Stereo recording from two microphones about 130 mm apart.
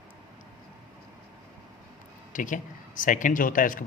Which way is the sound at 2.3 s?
85° left.